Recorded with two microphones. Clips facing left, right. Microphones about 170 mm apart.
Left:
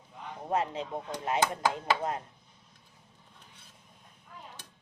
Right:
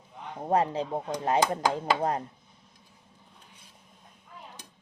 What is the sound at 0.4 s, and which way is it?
Speech, 35° right (ahead or behind).